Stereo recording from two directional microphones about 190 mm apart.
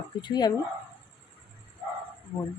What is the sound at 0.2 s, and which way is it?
Speech, 20° left (ahead or behind).